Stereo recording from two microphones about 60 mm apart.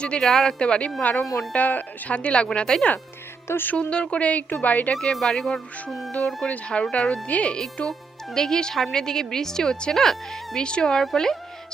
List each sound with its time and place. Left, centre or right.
0.0 s speech: centre
3.4 s speech: left
3.7 s speech: centre
4.9 s speech: centre
6.1 s speech: left
7.3 s speech: left
7.9 s speech: centre